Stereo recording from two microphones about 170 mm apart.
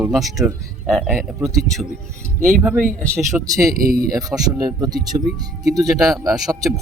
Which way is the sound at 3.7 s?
55° right (ahead or behind).